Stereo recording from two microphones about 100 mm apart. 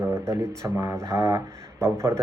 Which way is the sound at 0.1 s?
30° right (ahead or behind).